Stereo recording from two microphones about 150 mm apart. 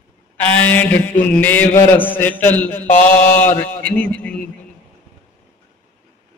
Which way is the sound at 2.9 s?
55° left (ahead or behind).